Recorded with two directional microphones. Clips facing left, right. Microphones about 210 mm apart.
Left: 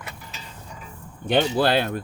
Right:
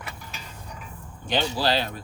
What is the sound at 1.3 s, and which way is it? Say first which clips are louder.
Speech: left 5 dB; 55° left (ahead or behind).